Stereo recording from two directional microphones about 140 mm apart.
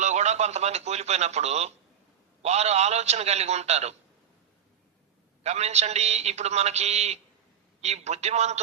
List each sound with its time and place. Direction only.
0.0 s a man's voice: 55° right (ahead or behind)
5.4 s a man's voice: 50° right (ahead or behind)